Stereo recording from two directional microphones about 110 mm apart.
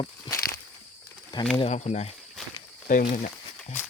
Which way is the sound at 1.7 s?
80° left.